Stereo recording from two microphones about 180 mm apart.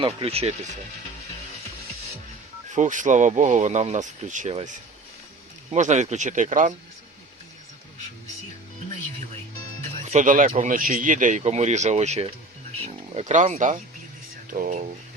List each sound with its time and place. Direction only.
0.0 s speech: 35° right (ahead or behind)
2.7 s speech: 45° right (ahead or behind)
10.0 s speech: 40° right (ahead or behind)